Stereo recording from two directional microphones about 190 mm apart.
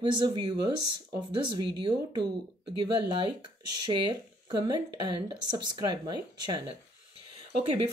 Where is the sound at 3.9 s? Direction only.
25° right (ahead or behind).